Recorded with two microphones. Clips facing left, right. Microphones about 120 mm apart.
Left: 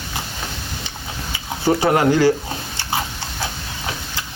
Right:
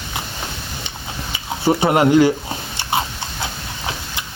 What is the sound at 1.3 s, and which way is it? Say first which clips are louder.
Speech: right 1 dB; 20° right (ahead or behind).